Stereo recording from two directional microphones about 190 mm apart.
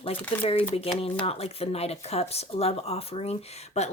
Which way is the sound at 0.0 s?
30° left (ahead or behind).